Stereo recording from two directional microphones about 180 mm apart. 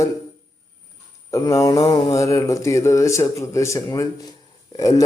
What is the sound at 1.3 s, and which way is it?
Speech, 20° left (ahead or behind).